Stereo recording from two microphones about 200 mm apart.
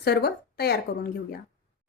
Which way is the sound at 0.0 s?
50° left (ahead or behind).